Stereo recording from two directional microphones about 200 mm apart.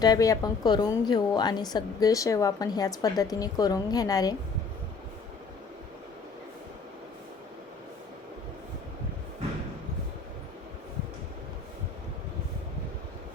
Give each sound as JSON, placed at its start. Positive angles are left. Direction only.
{"t": 0.0, "sound": "a woman's voice", "side_deg": 20}